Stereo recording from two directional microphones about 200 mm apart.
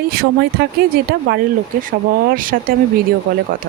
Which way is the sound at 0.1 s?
50° right (ahead or behind).